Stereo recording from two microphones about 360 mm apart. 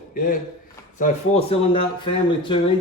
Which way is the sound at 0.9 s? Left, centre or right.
Centre.